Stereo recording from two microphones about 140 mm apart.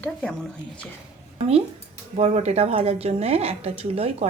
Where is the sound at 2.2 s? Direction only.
50° right (ahead or behind).